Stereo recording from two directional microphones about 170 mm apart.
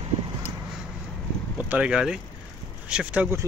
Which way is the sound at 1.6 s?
5° right (ahead or behind).